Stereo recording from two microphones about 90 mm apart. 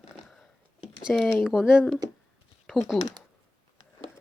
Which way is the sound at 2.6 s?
Centre (ahead or behind).